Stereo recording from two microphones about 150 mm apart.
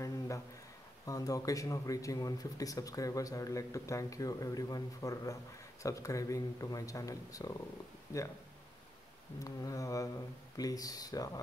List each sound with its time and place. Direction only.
1.0 s speech: 25° left (ahead or behind)
9.4 s speech: 20° left (ahead or behind)